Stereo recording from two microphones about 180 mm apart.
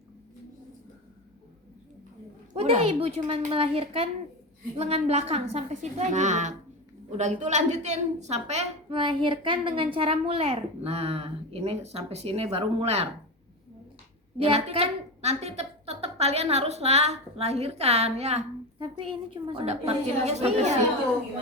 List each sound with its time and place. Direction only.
2.5 s a child's voice: 35° right (ahead or behind)
14.3 s a child's voice: 35° right (ahead or behind)